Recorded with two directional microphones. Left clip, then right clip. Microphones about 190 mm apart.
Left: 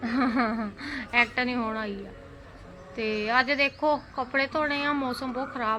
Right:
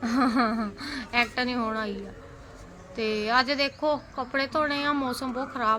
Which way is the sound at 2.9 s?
10° right (ahead or behind).